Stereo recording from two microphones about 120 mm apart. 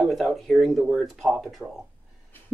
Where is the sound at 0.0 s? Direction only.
Centre (ahead or behind).